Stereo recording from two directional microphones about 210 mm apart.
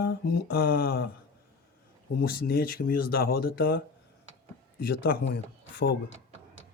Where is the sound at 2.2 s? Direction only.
45° left (ahead or behind).